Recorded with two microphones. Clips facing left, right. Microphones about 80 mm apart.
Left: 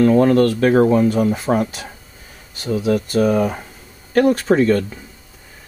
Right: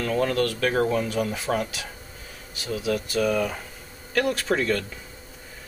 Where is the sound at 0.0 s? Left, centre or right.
Left.